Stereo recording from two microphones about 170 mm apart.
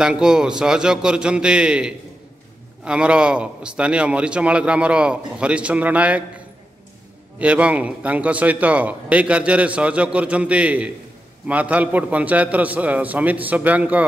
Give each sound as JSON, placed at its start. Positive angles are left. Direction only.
{"t": 0.0, "sound": "a man's voice", "side_deg": -5}